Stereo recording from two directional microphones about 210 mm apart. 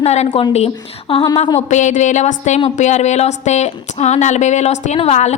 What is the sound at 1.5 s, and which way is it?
A woman's voice, 35° left (ahead or behind).